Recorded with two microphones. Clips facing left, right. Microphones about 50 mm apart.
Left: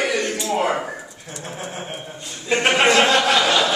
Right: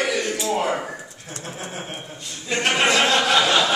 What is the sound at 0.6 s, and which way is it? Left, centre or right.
Speech, centre.